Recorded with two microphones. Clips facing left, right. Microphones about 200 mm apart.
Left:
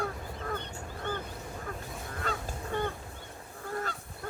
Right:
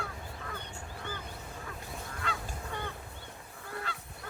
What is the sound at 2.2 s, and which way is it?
Goose, 45° left (ahead or behind).